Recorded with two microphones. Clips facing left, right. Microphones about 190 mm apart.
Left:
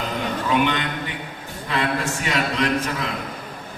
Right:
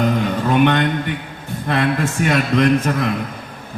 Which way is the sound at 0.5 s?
55° right (ahead or behind).